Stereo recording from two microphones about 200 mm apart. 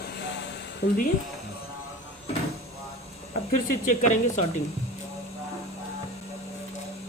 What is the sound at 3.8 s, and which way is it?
Speech, 40° left (ahead or behind).